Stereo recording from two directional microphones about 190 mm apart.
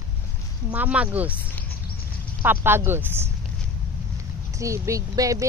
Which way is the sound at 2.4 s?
10° right (ahead or behind).